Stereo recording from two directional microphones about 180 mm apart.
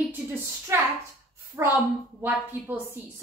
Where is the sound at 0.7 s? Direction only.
15° right (ahead or behind).